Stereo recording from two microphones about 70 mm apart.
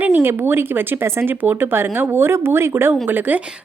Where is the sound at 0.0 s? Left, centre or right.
Right.